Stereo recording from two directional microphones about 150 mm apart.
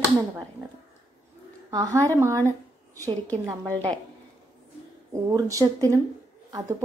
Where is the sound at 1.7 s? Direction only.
25° right (ahead or behind).